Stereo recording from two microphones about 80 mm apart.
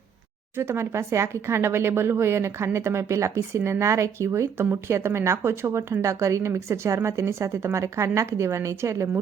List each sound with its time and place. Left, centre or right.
0.5 s speech: right
5.9 s speech: right